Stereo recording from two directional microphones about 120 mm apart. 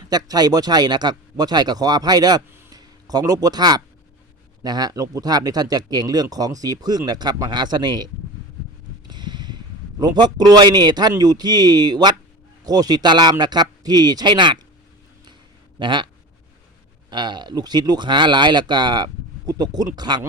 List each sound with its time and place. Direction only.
0.1 s speech: 35° right (ahead or behind)
9.0 s a sound: 35° right (ahead or behind)
10.0 s speech: 35° right (ahead or behind)
15.8 s speech: 40° right (ahead or behind)
17.1 s speech: 40° right (ahead or behind)